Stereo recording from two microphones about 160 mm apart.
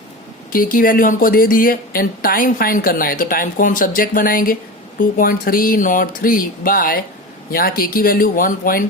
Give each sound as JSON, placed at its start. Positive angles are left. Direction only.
{"t": 0.5, "sound": "a woman's voice", "side_deg": 60}